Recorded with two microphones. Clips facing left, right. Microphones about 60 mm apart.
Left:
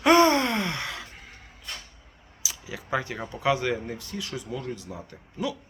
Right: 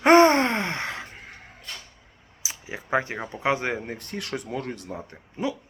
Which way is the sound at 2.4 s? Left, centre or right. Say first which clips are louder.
Right 1 dB; right.